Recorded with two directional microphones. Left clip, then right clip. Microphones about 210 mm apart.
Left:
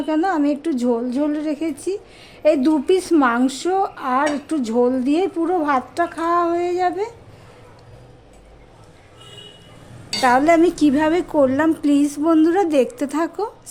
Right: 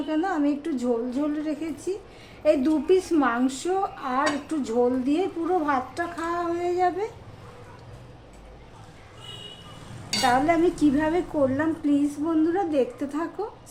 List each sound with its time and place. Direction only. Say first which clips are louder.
0.1 s a woman's voice: left 6 dB; 50° left (ahead or behind)
10.2 s a woman's voice: left 7 dB; 55° left (ahead or behind)